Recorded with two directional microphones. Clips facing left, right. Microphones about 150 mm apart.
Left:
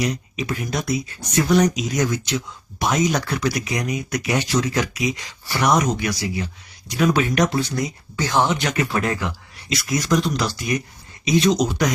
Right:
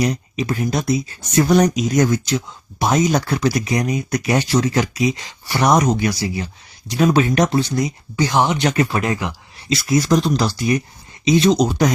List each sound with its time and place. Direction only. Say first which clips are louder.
0.0 s speech: right 4 dB; 35° right (ahead or behind)